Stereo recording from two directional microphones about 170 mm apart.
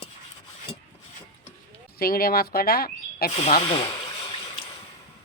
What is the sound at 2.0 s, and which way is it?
Speech, 60° left (ahead or behind).